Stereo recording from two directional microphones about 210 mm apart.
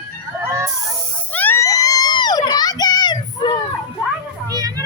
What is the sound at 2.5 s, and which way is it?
Children playing, 20° left (ahead or behind).